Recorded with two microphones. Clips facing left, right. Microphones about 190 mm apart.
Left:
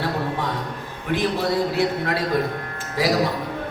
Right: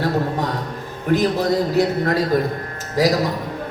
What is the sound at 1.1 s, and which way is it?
Speech, 40° right (ahead or behind).